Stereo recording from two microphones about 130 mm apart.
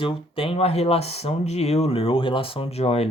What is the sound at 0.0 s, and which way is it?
Speech, 45° left (ahead or behind).